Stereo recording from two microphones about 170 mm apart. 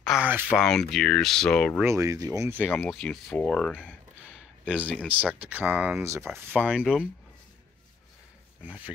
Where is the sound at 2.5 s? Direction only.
10° left (ahead or behind).